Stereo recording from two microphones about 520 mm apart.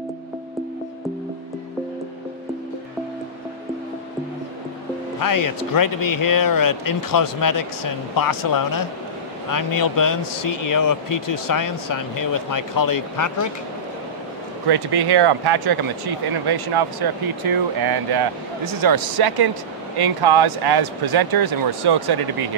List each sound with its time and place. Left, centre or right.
5.2 s speech: left
14.7 s speech: right